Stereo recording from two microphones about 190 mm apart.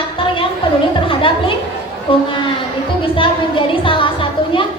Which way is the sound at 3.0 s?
25° left (ahead or behind).